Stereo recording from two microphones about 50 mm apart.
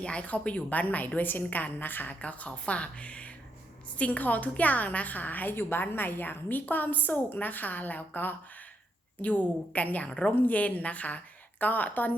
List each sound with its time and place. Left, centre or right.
0.0 s a woman's voice: left
2.2 s a woman's voice: left
10.1 s a woman's voice: centre
10.3 s a woman's voice: left